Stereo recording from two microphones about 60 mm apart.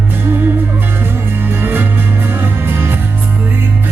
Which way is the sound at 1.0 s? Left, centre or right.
Right.